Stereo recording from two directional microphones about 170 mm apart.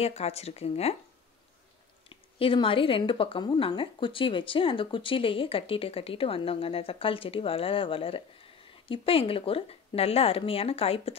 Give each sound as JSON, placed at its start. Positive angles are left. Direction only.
{"t": 0.0, "sound": "speech", "side_deg": 35}
{"t": 2.0, "sound": "speech", "side_deg": 30}